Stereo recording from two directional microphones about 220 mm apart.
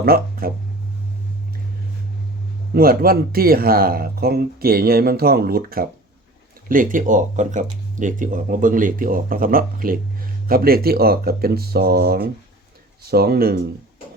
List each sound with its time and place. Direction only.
0.0 s speech: 40° right (ahead or behind)
2.7 s speech: 40° right (ahead or behind)